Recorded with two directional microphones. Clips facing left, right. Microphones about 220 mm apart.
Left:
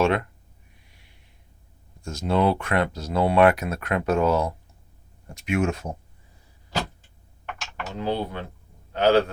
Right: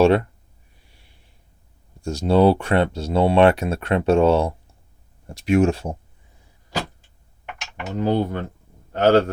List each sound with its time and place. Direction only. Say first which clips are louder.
0.0 s speech: right 6 dB; 35° right (ahead or behind)
0.9 s a sound: right 1 dB; 30° right (ahead or behind)
2.0 s speech: right 6 dB; 30° right (ahead or behind)
7.9 s a man's voice: right 6 dB; 45° right (ahead or behind)